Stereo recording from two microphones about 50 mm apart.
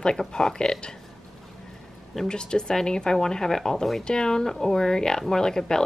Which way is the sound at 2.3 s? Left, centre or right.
Centre.